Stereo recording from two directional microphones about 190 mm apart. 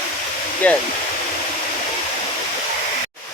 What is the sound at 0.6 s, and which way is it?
Speech, 10° left (ahead or behind).